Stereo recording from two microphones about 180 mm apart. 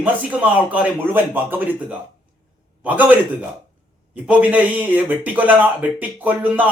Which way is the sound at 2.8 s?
10° right (ahead or behind).